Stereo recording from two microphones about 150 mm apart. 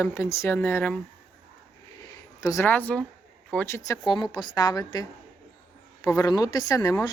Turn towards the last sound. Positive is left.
turn(degrees=20)  # may be behind; listen again after turning